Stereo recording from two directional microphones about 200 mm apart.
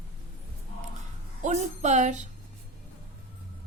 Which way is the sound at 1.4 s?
35° right (ahead or behind).